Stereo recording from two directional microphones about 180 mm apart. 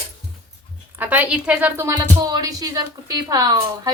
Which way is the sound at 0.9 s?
10° right (ahead or behind).